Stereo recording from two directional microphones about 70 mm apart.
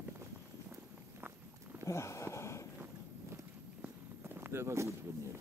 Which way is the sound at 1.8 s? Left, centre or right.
Left.